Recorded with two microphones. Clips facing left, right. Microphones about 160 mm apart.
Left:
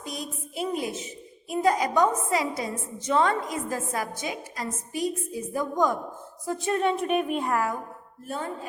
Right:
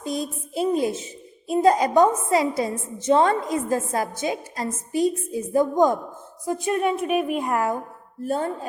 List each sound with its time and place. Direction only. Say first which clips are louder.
0.0 s a woman's voice: right 8 dB; 30° right (ahead or behind); by 7.5 s 10° right (ahead or behind)
7.5 s a woman's voice: right 4 dB; 25° right (ahead or behind)